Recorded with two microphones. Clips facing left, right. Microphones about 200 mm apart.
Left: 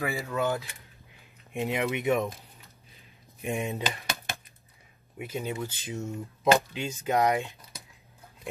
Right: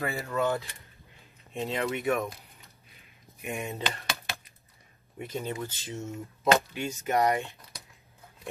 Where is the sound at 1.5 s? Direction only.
15° left (ahead or behind).